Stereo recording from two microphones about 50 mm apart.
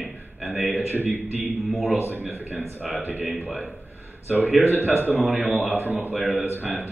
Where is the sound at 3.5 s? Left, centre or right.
Right.